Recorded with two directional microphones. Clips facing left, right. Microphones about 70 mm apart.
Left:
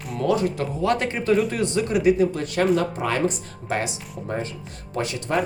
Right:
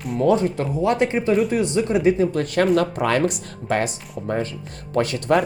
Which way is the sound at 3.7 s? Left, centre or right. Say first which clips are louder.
Right 4 dB; right.